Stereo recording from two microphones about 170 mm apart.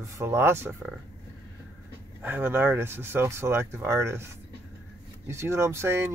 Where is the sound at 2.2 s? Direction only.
10° right (ahead or behind).